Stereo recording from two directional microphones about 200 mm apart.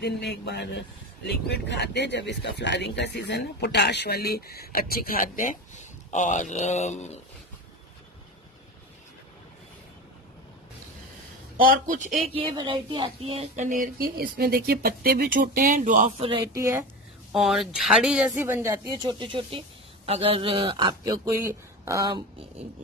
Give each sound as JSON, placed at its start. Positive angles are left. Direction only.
{"t": 0.0, "sound": "a man's voice", "side_deg": 55}
{"t": 11.5, "sound": "a man's voice", "side_deg": -45}
{"t": 12.3, "sound": "speech", "side_deg": -30}
{"t": 16.3, "sound": "speech", "side_deg": -20}
{"t": 17.3, "sound": "a man's voice", "side_deg": 0}